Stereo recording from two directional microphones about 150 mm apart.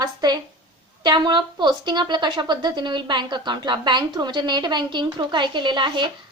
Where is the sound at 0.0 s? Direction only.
25° right (ahead or behind).